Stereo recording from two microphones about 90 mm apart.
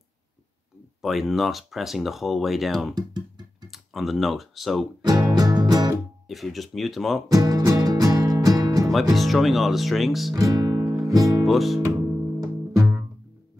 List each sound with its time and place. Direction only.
1.0 s speech: centre (ahead or behind)
2.9 s music: 50° right (ahead or behind)
3.7 s speech: centre (ahead or behind)
5.0 s music: 45° right (ahead or behind)
6.2 s speech: centre (ahead or behind)
7.2 s music: 45° right (ahead or behind)
9.1 s speech: centre (ahead or behind)
10.3 s music: 45° right (ahead or behind)
11.4 s speech: centre (ahead or behind)
12.4 s music: 30° right (ahead or behind)